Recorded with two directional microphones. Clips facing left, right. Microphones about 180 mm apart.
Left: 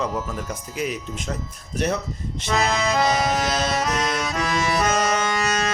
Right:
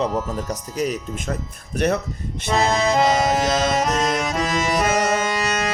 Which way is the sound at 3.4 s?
50° right (ahead or behind).